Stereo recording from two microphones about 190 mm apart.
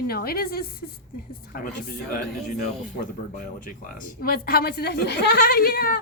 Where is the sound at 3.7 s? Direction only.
50° left (ahead or behind).